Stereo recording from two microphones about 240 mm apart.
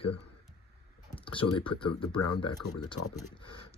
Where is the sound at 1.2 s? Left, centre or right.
Left.